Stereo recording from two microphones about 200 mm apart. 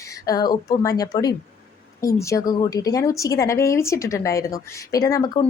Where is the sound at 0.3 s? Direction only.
20° left (ahead or behind).